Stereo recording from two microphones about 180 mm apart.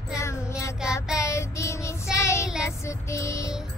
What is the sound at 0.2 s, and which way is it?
Child singing, 15° left (ahead or behind).